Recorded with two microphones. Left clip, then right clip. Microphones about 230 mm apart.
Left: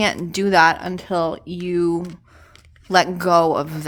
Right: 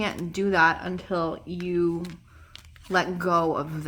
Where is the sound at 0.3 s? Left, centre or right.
Left.